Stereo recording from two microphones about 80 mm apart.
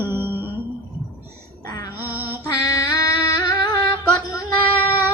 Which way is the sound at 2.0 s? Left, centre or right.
Right.